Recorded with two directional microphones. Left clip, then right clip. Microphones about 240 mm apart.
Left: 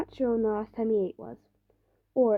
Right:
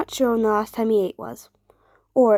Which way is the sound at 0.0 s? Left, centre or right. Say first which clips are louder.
Right 7 dB; right.